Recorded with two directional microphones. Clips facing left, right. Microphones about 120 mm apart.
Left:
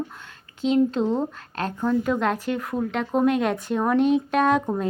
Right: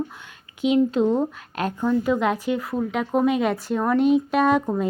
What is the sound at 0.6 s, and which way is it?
Speech, 10° right (ahead or behind).